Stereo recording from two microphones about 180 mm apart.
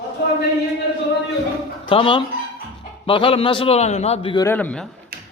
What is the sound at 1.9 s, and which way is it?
A man's voice, 30° left (ahead or behind).